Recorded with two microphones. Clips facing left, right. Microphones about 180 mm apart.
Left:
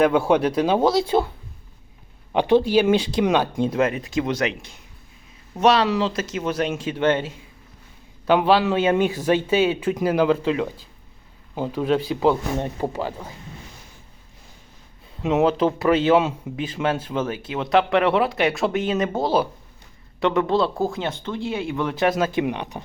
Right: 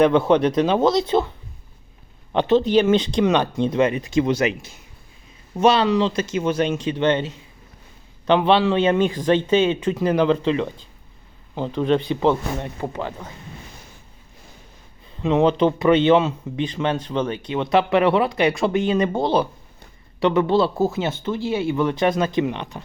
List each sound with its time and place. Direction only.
0.0 s a man's voice: 10° left (ahead or behind)
2.3 s a man's voice: 10° left (ahead or behind)
12.5 s speech: 20° left (ahead or behind)
13.0 s a man's voice: 10° left (ahead or behind)
15.2 s speech: 5° left (ahead or behind)